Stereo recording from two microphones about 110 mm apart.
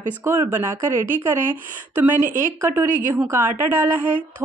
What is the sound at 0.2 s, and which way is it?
Speech, 25° right (ahead or behind).